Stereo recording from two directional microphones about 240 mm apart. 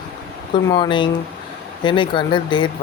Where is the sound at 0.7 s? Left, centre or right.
Centre.